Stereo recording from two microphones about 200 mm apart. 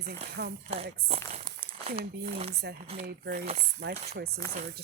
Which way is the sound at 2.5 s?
55° right (ahead or behind).